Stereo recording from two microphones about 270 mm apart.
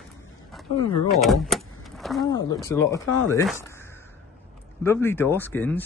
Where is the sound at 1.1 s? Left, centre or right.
Centre.